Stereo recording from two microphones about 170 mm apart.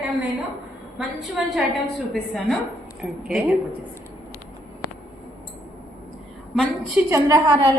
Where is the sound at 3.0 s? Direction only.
5° right (ahead or behind).